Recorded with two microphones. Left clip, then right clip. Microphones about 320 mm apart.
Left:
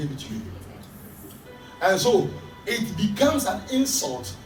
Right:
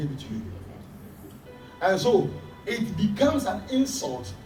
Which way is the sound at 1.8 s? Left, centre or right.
Centre.